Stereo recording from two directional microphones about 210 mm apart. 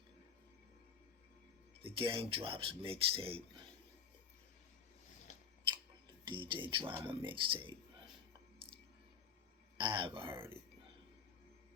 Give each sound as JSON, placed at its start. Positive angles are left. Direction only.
{"t": 1.8, "sound": "speech", "side_deg": -25}
{"t": 6.1, "sound": "speech", "side_deg": -25}
{"t": 9.7, "sound": "speech", "side_deg": -25}